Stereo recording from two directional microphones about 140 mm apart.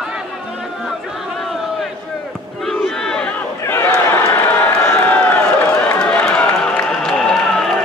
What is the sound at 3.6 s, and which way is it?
Run, 15° left (ahead or behind).